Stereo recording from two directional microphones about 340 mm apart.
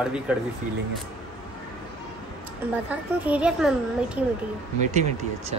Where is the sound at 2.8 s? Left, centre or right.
Centre.